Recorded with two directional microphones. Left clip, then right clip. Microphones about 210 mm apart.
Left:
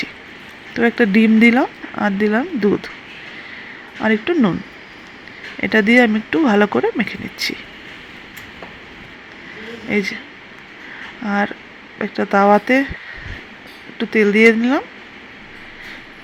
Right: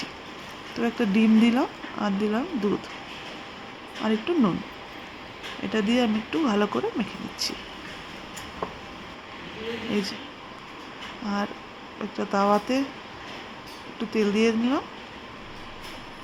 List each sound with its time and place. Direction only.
0.8 s speech: 15° left (ahead or behind)
4.0 s speech: 15° left (ahead or behind)
5.7 s speech: 15° left (ahead or behind)
9.9 s speech: 15° left (ahead or behind)
11.2 s speech: 15° left (ahead or behind)
14.0 s speech: 15° left (ahead or behind)